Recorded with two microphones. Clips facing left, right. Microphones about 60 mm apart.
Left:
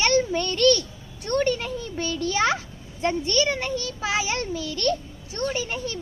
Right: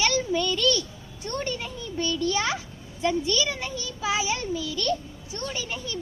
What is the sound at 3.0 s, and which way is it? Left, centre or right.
A child's voice, left.